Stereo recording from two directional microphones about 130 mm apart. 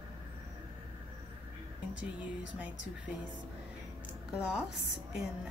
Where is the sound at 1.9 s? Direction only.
10° right (ahead or behind).